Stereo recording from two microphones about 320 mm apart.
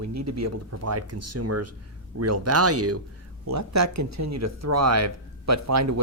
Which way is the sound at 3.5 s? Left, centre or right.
Right.